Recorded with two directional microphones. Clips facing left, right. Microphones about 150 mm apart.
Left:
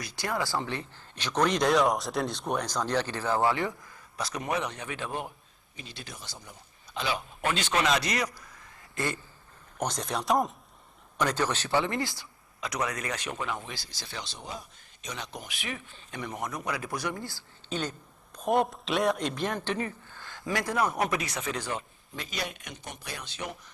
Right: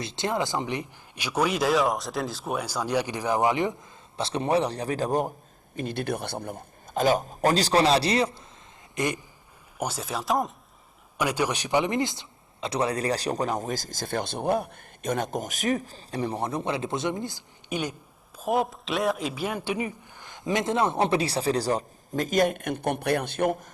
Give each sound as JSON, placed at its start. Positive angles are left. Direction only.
{"t": 0.0, "sound": "speech", "side_deg": -25}
{"t": 5.7, "sound": "a man's voice", "side_deg": -55}
{"t": 9.0, "sound": "speech", "side_deg": -15}
{"t": 9.7, "sound": "speech", "side_deg": -5}
{"t": 11.2, "sound": "a man's voice", "side_deg": -10}
{"t": 18.3, "sound": "speech", "side_deg": 0}